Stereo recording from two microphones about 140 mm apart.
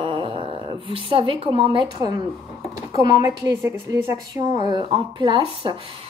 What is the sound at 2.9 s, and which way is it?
A woman's voice, 25° right (ahead or behind).